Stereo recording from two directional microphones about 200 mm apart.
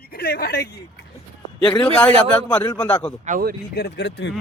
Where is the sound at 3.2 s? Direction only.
45° right (ahead or behind).